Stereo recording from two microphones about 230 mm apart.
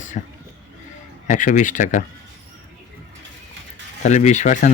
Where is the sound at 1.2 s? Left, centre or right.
Left.